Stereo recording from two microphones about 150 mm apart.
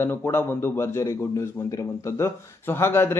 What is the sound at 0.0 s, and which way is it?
A man's voice, 15° left (ahead or behind).